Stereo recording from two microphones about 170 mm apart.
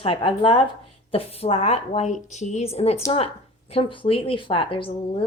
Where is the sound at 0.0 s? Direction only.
30° left (ahead or behind).